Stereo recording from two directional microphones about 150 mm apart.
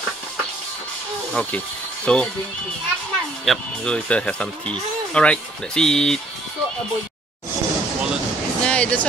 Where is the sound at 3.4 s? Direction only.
5° left (ahead or behind).